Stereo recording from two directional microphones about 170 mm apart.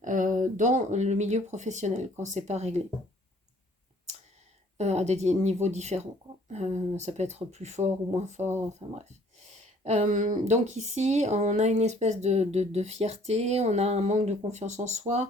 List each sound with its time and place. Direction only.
0.0 s speech: 50° right (ahead or behind)
4.8 s speech: 40° right (ahead or behind)